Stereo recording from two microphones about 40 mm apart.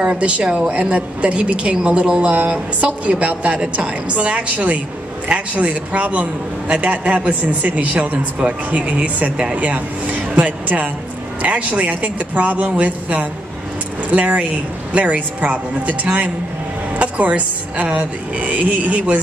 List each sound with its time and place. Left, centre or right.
0.0 s a woman's voice: right